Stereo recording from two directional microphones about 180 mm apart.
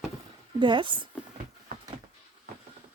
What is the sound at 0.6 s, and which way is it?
Speech, 25° right (ahead or behind).